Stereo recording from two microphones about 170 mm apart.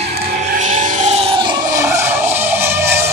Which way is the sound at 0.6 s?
45° right (ahead or behind).